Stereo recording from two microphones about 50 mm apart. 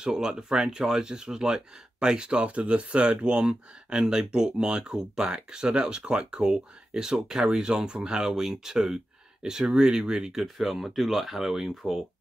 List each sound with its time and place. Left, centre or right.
0.0 s speech: centre
10.4 s speech: centre